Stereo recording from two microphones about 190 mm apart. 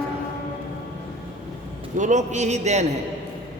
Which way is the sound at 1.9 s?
40° right (ahead or behind).